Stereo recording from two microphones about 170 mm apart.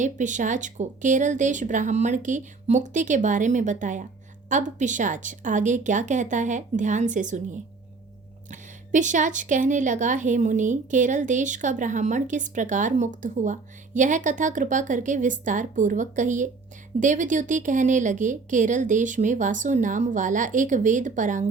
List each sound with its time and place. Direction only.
0.0 s a woman's voice: 45° right (ahead or behind)
8.4 s a woman's voice: 45° right (ahead or behind)